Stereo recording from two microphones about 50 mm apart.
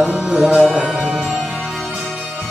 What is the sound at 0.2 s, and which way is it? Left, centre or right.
Music, centre.